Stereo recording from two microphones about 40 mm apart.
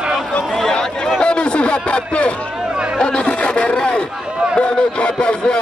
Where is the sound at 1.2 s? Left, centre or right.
Left.